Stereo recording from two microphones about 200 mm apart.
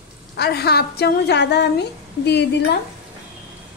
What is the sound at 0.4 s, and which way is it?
A woman's voice, 55° left (ahead or behind).